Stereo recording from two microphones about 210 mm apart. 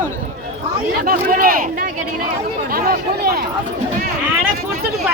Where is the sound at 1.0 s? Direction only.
45° right (ahead or behind).